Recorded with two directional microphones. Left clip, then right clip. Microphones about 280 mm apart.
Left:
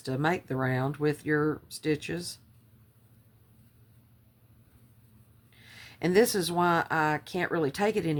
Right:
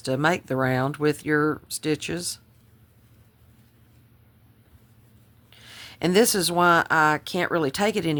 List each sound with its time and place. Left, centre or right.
0.0 s speech: right
5.5 s speech: right